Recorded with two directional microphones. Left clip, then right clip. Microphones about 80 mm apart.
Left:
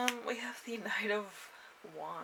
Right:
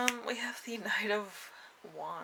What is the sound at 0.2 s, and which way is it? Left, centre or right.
Speech, right.